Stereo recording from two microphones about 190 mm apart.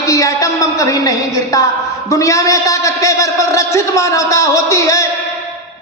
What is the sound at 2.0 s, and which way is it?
A man's voice, 15° left (ahead or behind).